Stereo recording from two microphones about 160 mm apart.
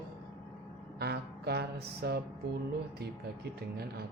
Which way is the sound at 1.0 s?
90° right.